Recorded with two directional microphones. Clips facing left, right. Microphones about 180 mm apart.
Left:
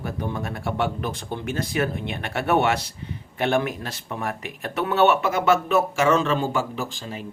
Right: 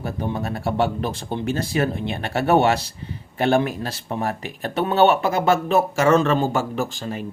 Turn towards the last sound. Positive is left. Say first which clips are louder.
# right 5 dB
turn(degrees=-50)  # may be behind; listen again after turning